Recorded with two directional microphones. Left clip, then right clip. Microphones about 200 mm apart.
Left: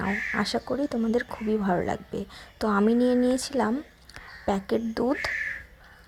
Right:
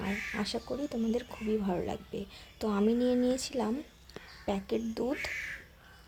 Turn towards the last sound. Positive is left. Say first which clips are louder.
# left 7 dB
turn(degrees=20)  # may be behind; listen again after turning